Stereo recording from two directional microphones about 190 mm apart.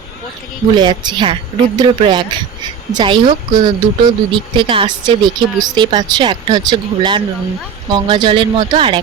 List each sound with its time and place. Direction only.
0.8 s speech: 25° right (ahead or behind)